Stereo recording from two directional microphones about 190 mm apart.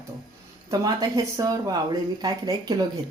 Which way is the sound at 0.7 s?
20° right (ahead or behind).